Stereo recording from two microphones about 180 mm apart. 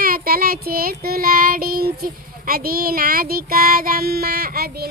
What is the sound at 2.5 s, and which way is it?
Child singing, 55° right (ahead or behind).